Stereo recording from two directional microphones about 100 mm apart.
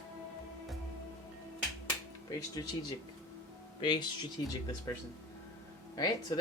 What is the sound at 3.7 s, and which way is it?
Speech, 50° left (ahead or behind).